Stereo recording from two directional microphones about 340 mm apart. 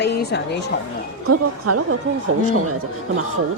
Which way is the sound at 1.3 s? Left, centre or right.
Right.